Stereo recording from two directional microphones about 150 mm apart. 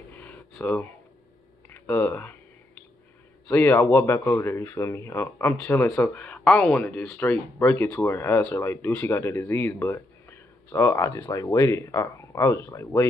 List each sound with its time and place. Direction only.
0.1 s a sound: 10° left (ahead or behind)
1.7 s clicking: 15° left (ahead or behind)
3.4 s speech: 15° left (ahead or behind)